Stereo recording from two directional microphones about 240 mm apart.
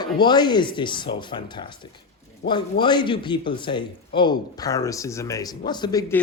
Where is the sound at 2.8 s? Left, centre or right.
Centre.